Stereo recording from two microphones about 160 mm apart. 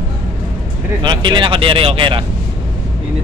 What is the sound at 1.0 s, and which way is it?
Speech, 30° right (ahead or behind).